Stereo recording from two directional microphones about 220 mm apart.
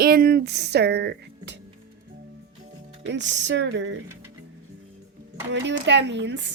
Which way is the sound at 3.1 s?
55° right (ahead or behind).